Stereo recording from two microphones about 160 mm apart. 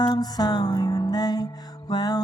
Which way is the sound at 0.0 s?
25° left (ahead or behind).